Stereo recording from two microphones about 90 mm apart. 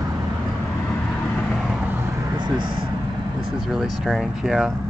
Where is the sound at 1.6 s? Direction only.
5° right (ahead or behind).